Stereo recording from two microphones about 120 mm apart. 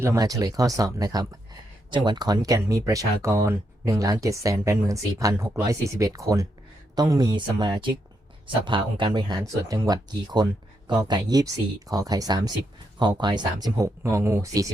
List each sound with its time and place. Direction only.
0.0 s speech: 25° right (ahead or behind); by 9.4 s 40° right (ahead or behind)
9.4 s speech: 25° right (ahead or behind)